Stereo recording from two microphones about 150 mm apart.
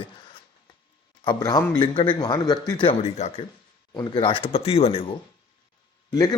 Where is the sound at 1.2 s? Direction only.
30° left (ahead or behind).